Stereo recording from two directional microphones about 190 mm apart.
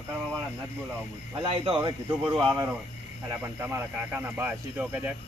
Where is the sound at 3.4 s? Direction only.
15° right (ahead or behind).